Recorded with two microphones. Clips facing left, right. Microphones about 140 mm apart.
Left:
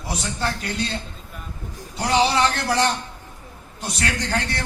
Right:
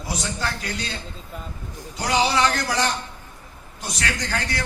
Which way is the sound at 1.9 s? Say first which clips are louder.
Left 2 dB; 25° left (ahead or behind).